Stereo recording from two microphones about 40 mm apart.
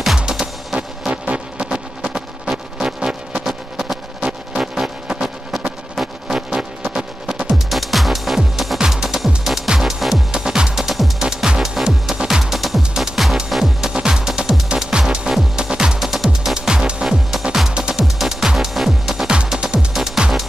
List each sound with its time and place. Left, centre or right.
0.2 s music: centre
1.1 s music: right
3.4 s music: centre
7.5 s music: centre
10.3 s music: centre
10.8 s music: centre
11.1 s music: centre
16.0 s music: centre
16.5 s music: centre
18.0 s music: centre
18.7 s music: centre
19.5 s music: right
19.9 s music: centre